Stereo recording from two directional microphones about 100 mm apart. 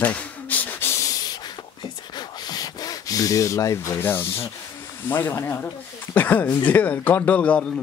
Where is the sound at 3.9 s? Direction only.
20° left (ahead or behind).